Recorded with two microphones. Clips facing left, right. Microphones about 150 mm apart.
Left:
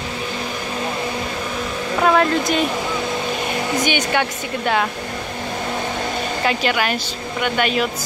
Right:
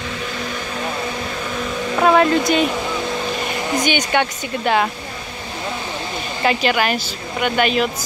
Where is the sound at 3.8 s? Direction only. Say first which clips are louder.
Right 3 dB; 5° left (ahead or behind).